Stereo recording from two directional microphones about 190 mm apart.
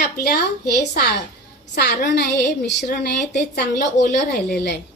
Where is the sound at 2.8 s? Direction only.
40° left (ahead or behind).